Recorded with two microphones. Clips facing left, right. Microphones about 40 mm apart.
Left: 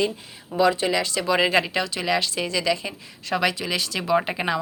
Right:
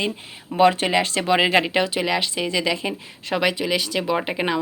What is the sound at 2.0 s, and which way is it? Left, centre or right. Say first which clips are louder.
Speech: right 1 dB; centre.